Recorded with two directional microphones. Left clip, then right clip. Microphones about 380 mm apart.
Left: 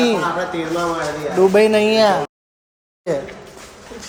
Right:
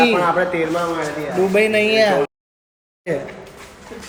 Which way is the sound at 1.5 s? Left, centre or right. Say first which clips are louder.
Right 1 dB; centre.